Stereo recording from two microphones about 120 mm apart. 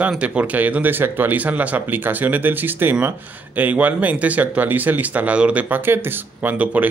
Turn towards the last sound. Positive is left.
turn(degrees=-15)  # may be behind; listen again after turning